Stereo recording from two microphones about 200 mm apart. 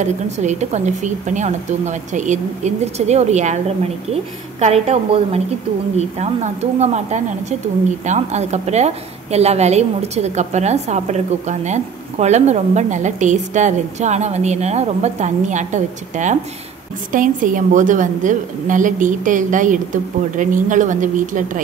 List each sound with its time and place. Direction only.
0.0 s a woman's voice: 35° right (ahead or behind)